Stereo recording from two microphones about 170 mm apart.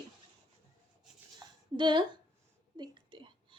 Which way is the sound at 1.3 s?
25° right (ahead or behind).